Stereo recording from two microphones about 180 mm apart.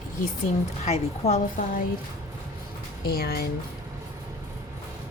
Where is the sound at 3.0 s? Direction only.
55° left (ahead or behind).